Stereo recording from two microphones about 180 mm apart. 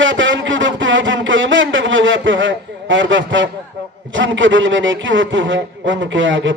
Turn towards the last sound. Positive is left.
turn(degrees=-90)